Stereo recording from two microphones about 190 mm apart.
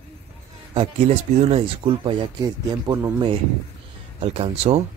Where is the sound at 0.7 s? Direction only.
30° right (ahead or behind).